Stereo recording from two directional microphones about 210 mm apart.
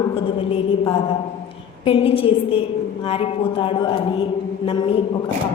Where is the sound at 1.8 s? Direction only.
25° left (ahead or behind).